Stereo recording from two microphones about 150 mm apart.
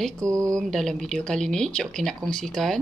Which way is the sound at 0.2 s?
20° right (ahead or behind).